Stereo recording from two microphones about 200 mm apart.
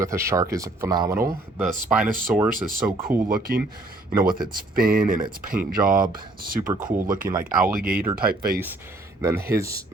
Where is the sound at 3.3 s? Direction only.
45° right (ahead or behind).